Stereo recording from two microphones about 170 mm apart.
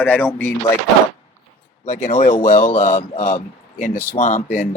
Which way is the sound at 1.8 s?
45° left (ahead or behind).